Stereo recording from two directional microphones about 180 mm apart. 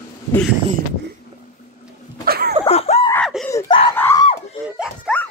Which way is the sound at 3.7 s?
30° left (ahead or behind).